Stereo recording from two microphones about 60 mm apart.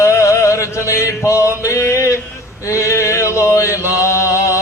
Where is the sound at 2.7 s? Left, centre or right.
Left.